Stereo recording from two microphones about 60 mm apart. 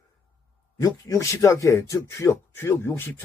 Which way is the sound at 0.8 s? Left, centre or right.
Left.